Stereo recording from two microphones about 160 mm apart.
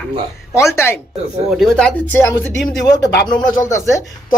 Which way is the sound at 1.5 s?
Centre (ahead or behind).